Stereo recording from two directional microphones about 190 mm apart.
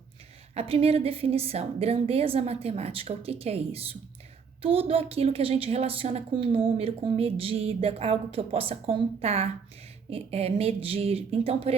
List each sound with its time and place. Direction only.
0.5 s a woman's voice: 30° right (ahead or behind)